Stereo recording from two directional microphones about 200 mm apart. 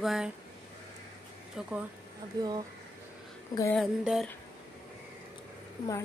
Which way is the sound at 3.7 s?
Centre (ahead or behind).